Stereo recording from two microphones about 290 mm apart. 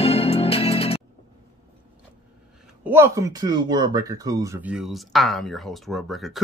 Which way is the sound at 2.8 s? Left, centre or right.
Centre.